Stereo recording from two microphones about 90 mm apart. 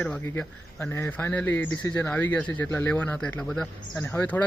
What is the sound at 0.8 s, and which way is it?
A man's voice, 25° left (ahead or behind).